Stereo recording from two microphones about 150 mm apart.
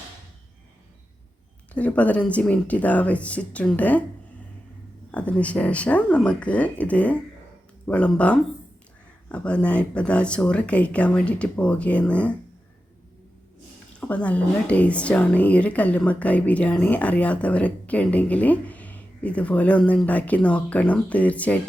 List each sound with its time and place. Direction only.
1.7 s a woman's voice: 10° left (ahead or behind)
5.1 s a woman's voice: 10° left (ahead or behind)
14.0 s a woman's voice: 10° left (ahead or behind)